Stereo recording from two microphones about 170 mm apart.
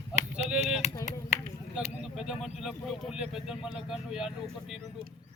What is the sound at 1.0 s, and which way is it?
Speech, 45° left (ahead or behind).